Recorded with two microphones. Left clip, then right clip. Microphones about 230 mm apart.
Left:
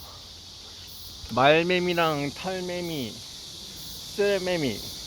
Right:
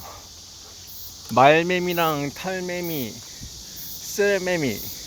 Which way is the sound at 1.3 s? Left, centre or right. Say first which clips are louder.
Right 4 dB; right.